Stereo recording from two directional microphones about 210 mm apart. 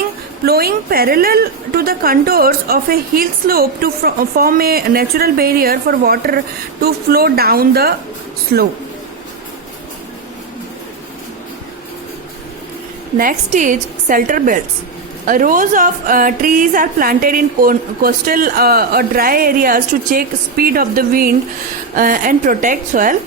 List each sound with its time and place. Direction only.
0.4 s a woman's voice: 45° right (ahead or behind)
13.1 s a woman's voice: 40° right (ahead or behind)